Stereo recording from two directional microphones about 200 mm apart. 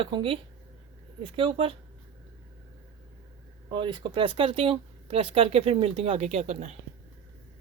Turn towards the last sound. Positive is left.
turn(degrees=-35)  # may be behind; listen again after turning